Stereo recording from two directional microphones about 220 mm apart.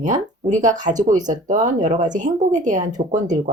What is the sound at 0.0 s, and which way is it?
Speech, 35° right (ahead or behind).